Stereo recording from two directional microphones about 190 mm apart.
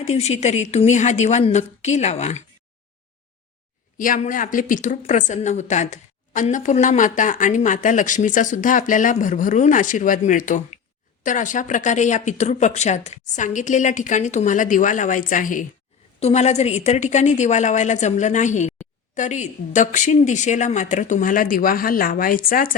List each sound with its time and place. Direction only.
0.0 s a woman's voice: 35° left (ahead or behind)
3.9 s a woman's voice: 45° left (ahead or behind)